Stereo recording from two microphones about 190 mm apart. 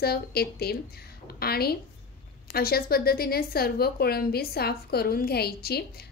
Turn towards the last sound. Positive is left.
turn(degrees=55)  # may be behind; listen again after turning